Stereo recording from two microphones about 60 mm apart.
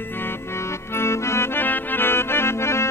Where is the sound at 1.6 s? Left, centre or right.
Left.